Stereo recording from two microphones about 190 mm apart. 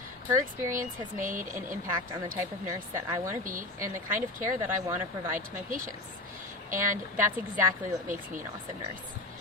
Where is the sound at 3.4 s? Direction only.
45° right (ahead or behind).